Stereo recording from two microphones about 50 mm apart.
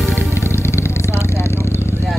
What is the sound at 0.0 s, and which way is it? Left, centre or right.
Vehicle, left.